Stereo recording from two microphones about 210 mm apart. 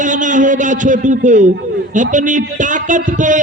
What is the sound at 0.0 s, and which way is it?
A man's voice, 35° right (ahead or behind).